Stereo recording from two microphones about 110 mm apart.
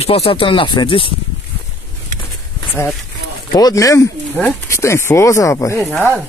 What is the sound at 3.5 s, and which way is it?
Speech, 35° left (ahead or behind).